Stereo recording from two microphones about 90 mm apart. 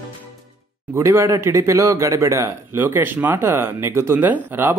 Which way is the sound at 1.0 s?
30° right (ahead or behind).